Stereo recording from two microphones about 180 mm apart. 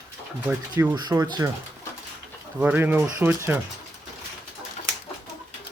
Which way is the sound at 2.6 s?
10° right (ahead or behind).